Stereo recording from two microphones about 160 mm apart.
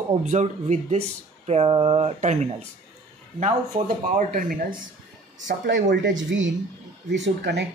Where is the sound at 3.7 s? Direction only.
65° right (ahead or behind).